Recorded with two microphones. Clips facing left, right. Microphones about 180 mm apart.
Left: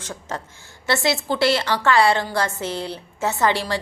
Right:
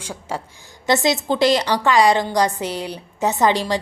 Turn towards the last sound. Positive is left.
turn(degrees=-15)  # may be behind; listen again after turning